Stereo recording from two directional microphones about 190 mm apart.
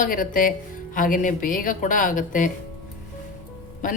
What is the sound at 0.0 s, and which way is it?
A woman's voice, 45° left (ahead or behind).